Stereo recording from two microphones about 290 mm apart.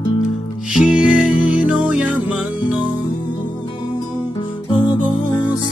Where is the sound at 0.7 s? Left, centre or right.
Centre.